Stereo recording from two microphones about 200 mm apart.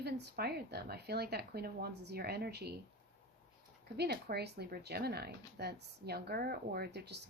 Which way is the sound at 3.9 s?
55° right (ahead or behind).